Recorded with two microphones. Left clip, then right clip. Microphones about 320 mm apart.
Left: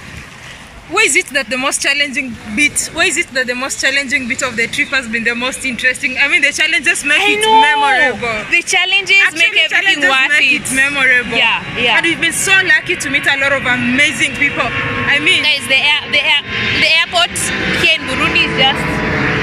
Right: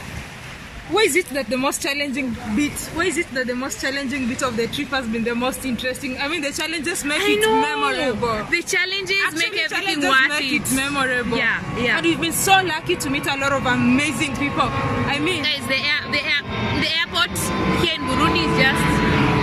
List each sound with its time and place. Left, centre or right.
0.9 s speech: centre
7.2 s speech: centre
7.8 s speech: centre
8.5 s speech: centre
10.8 s speech: centre
12.0 s speech: centre
15.4 s speech: centre
16.5 s speech: centre
16.8 s speech: centre